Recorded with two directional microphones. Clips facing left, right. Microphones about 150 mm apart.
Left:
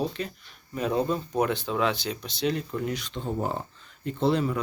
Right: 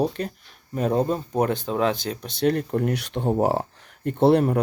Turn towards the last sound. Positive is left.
turn(degrees=-60)  # may be behind; listen again after turning